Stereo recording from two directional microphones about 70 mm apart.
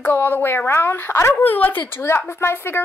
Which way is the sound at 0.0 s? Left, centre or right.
Left.